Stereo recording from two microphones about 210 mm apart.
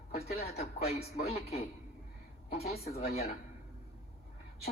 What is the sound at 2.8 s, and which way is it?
Speech, 30° left (ahead or behind).